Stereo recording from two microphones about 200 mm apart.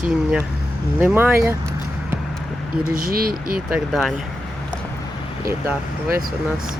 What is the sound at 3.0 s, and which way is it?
Speech, 50° right (ahead or behind).